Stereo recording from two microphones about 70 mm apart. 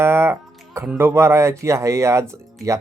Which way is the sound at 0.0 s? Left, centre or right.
Right.